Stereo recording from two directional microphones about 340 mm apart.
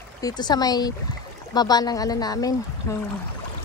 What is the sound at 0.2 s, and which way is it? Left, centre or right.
Speech, centre.